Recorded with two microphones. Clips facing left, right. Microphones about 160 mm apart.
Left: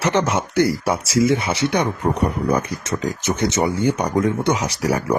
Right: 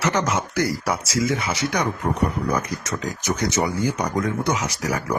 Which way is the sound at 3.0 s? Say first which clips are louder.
Left 4 dB; 25° left (ahead or behind).